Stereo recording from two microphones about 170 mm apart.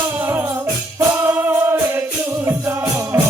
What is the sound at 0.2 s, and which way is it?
Music, 10° right (ahead or behind).